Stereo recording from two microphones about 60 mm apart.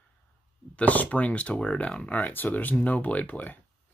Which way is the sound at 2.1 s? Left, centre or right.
Left.